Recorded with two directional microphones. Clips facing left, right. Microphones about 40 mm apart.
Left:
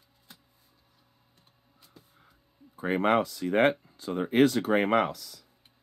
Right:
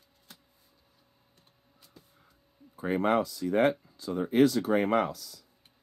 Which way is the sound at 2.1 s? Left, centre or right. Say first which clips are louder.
Left 1 dB; left.